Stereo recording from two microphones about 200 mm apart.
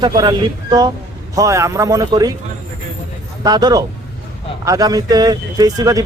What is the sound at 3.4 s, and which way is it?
Speech, 20° right (ahead or behind).